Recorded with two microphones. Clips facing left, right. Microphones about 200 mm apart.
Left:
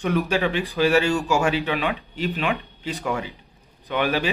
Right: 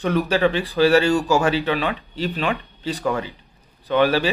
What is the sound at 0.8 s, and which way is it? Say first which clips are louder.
Speech: right 3 dB; 40° right (ahead or behind).